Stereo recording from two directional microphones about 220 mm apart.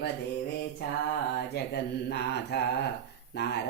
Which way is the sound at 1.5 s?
50° left (ahead or behind).